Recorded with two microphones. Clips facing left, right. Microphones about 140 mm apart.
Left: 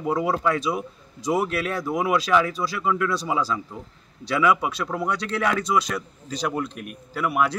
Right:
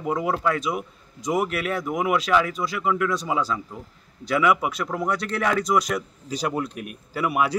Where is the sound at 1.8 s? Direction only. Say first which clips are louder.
Left 1 dB; 15° right (ahead or behind).